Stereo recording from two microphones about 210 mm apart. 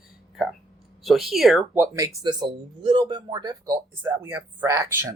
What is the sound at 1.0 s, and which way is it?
Speech, centre (ahead or behind).